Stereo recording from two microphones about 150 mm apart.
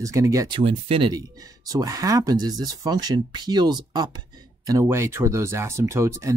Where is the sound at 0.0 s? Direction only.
20° right (ahead or behind).